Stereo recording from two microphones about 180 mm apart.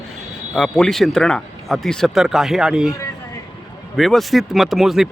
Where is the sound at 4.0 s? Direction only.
Centre (ahead or behind).